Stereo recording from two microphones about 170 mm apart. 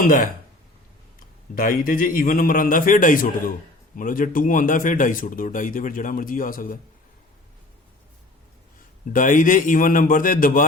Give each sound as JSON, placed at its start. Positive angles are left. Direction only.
{"t": 0.0, "sound": "a man's voice", "side_deg": 55}
{"t": 1.5, "sound": "a man's voice", "side_deg": 55}
{"t": 9.1, "sound": "speech", "side_deg": 50}